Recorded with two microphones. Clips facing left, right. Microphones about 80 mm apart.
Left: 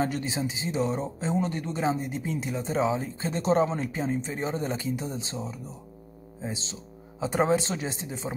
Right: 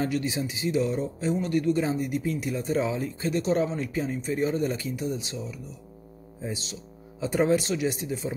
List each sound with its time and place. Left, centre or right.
0.0 s speech: left